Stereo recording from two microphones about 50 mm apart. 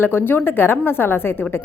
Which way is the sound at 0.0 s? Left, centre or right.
Left.